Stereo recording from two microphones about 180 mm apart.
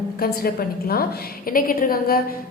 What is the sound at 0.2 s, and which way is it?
A woman's voice, 55° left (ahead or behind).